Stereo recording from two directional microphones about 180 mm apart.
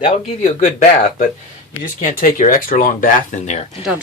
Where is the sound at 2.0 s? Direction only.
50° left (ahead or behind).